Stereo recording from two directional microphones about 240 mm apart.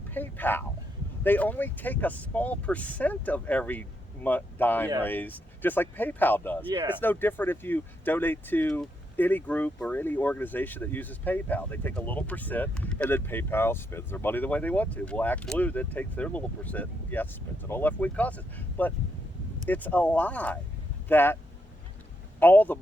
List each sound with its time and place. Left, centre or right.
0.1 s speech: centre
6.7 s speech: centre
7.0 s speech: centre
22.4 s speech: centre